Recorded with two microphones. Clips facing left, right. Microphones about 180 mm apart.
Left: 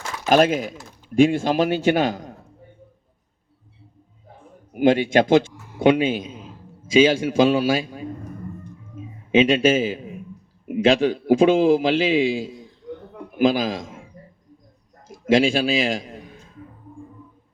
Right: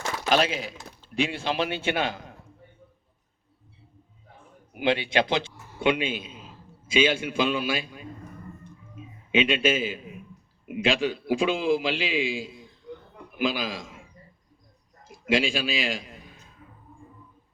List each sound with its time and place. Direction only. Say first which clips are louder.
0.3 s a man's voice: left 8 dB; 50° left (ahead or behind)
4.7 s a man's voice: left 8 dB; 45° left (ahead or behind)
9.3 s a man's voice: left 7 dB; 40° left (ahead or behind)
15.0 s a man's voice: left 7 dB; 40° left (ahead or behind)